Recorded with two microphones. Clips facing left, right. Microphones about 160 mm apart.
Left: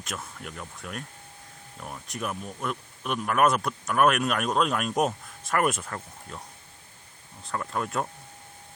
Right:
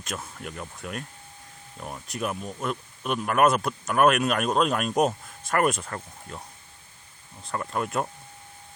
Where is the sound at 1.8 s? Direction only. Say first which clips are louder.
Right 3 dB; 5° right (ahead or behind).